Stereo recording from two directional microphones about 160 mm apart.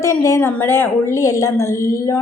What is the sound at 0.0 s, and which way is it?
A woman's voice, 15° left (ahead or behind).